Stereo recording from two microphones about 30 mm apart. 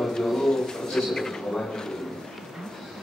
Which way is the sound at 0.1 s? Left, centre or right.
Centre.